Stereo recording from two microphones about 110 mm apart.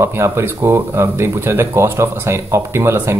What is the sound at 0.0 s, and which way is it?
Speech, 25° right (ahead or behind).